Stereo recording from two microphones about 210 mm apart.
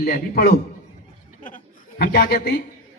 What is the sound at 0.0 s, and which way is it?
A man's voice, 45° left (ahead or behind).